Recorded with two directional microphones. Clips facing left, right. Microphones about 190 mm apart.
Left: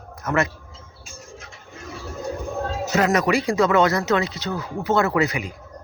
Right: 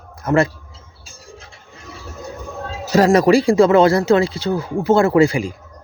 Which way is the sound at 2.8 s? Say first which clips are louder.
Right 8 dB; 30° right (ahead or behind).